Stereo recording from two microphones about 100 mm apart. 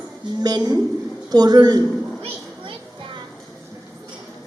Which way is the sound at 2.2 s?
60° right (ahead or behind).